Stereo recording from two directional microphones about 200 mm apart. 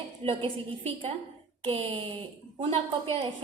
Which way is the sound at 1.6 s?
25° right (ahead or behind).